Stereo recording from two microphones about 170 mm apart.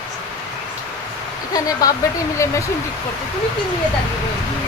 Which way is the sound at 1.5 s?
20° left (ahead or behind).